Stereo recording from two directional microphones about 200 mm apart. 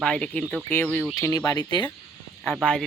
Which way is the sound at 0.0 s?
5° left (ahead or behind).